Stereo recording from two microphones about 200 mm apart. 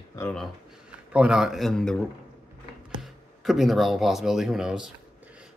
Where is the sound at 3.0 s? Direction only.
Centre (ahead or behind).